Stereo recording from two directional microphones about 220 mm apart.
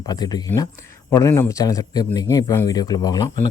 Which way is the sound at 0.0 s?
20° left (ahead or behind).